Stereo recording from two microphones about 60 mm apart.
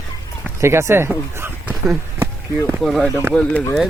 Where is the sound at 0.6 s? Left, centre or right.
Right.